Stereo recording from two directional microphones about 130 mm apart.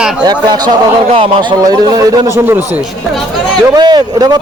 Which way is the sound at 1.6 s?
30° right (ahead or behind).